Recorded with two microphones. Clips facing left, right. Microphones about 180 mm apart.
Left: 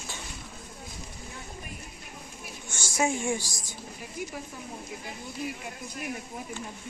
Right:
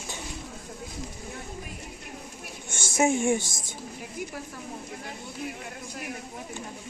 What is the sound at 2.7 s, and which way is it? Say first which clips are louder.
Speech: right 4 dB; 25° right (ahead or behind).